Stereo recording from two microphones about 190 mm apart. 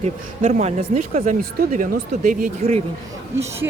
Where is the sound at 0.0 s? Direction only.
35° right (ahead or behind).